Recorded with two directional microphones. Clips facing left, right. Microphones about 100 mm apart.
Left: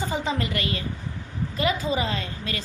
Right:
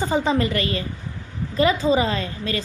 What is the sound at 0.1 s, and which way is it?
A woman's voice, 35° right (ahead or behind).